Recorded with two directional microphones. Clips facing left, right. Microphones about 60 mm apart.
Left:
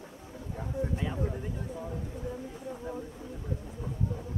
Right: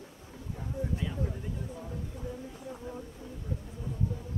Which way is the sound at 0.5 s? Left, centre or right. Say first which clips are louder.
Left 2 dB; left.